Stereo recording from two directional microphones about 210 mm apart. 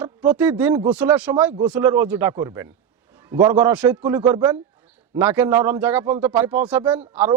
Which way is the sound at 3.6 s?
10° right (ahead or behind).